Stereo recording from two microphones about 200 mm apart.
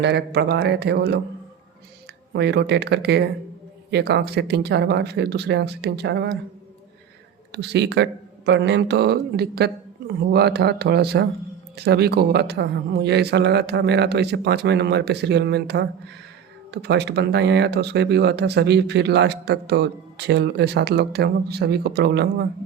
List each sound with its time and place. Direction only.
0.0 s speech: 55° right (ahead or behind)
2.3 s speech: 60° right (ahead or behind)
7.5 s speech: 55° right (ahead or behind)